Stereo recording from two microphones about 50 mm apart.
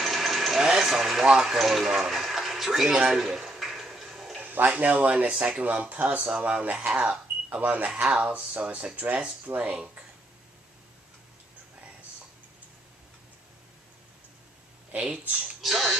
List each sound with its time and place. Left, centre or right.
0.0 s engine: centre
3.1 s tick-tock: centre
4.4 s speech: right
6.9 s speech: centre
7.5 s speech: right
14.9 s speech: right
15.6 s speech: centre